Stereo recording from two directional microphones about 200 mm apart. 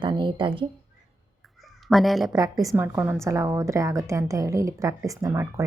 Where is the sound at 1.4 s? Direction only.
Centre (ahead or behind).